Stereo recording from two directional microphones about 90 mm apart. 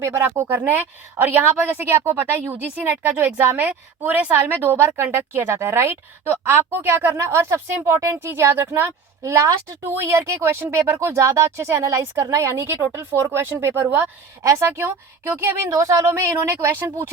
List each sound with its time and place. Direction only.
0.0 s a woman's voice: 30° right (ahead or behind)
15.7 s a woman's voice: 40° right (ahead or behind)